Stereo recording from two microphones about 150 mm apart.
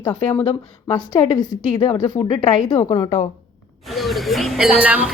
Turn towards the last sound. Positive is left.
turn(degrees=-10)  # may be behind; listen again after turning